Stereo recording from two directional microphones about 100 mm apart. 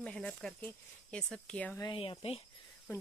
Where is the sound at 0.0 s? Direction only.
10° left (ahead or behind).